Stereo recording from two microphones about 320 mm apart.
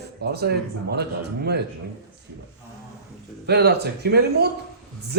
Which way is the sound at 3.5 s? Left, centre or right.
Right.